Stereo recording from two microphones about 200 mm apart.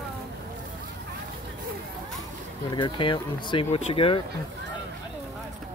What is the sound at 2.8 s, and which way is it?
Speech, 25° left (ahead or behind).